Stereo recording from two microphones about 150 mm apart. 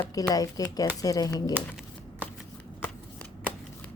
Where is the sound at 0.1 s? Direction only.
25° left (ahead or behind).